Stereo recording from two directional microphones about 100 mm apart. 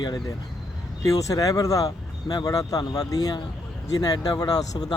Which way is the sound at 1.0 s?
35° left (ahead or behind).